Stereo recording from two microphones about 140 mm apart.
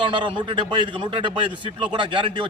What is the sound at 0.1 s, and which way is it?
A man's voice, 35° right (ahead or behind).